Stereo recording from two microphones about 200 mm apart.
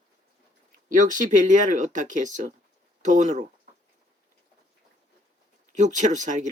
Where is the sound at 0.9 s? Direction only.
40° right (ahead or behind).